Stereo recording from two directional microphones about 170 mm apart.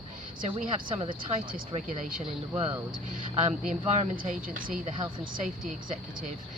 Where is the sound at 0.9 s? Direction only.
40° right (ahead or behind).